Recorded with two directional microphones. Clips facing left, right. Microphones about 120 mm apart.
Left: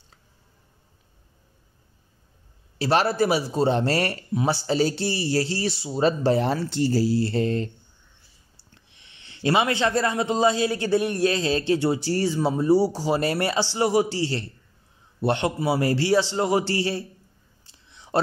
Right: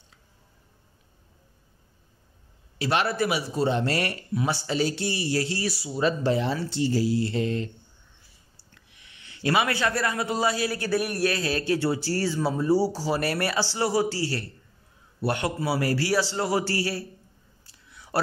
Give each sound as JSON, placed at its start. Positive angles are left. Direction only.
{"t": 2.8, "sound": "speech", "side_deg": 35}
{"t": 8.7, "sound": "a man's voice", "side_deg": 30}
{"t": 17.6, "sound": "whispering", "side_deg": 25}